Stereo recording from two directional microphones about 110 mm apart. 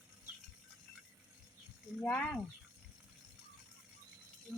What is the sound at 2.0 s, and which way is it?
Speech, 10° left (ahead or behind).